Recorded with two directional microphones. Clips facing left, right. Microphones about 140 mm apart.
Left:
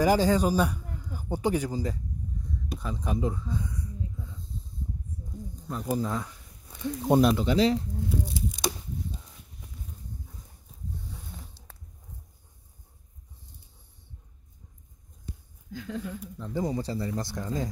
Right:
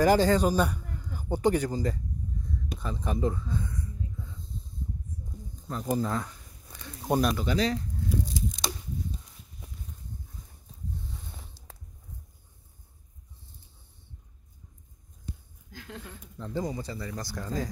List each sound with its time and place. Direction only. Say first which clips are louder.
0.0 s speech: right 1 dB; 10° left (ahead or behind)
5.7 s speech: even; 10° left (ahead or behind)
6.7 s speech: left 5 dB; 20° left (ahead or behind)
8.5 s a sound: left 3 dB; 10° left (ahead or behind)
16.2 s a sound: left 1 dB; 5° left (ahead or behind)
16.6 s speech: left 5 dB; 30° left (ahead or behind)